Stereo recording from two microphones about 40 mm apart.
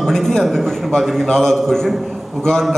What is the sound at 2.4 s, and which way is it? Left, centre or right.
Speech, centre.